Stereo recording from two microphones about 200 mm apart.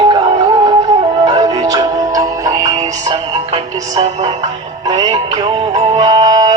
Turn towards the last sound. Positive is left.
turn(degrees=-20)  # may be behind; listen again after turning